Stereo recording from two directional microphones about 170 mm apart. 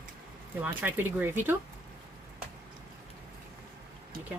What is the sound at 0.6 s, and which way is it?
Speech, 10° right (ahead or behind).